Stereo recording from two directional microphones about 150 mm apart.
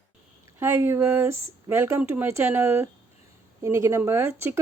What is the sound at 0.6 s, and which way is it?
Speech, 15° right (ahead or behind).